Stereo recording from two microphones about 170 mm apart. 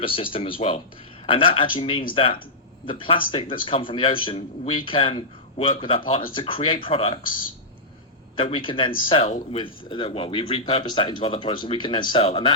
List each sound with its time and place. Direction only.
0.0 s speech: 30° left (ahead or behind)
8.4 s speech: 30° left (ahead or behind)